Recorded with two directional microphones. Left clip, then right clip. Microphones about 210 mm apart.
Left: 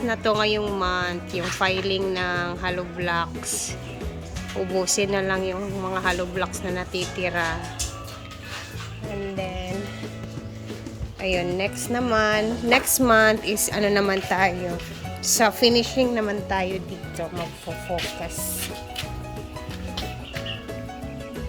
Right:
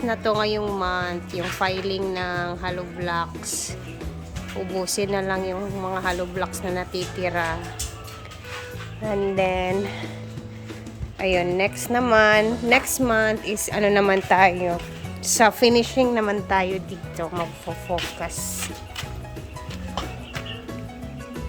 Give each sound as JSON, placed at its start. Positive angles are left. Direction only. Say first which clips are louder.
{"t": 0.1, "sound": "speech", "louder": "left 1 dB", "side_deg": -5}
{"t": 9.4, "sound": "a woman's voice", "louder": "right 12 dB", "side_deg": -15}
{"t": 11.2, "sound": "a woman's voice", "louder": "right 3 dB", "side_deg": -10}